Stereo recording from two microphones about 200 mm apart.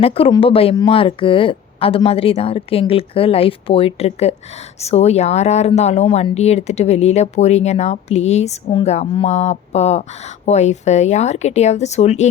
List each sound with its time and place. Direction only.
0.0 s a woman's voice: 30° left (ahead or behind)